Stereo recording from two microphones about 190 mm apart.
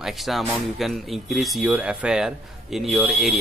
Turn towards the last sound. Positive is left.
turn(degrees=0)  # may be behind; listen again after turning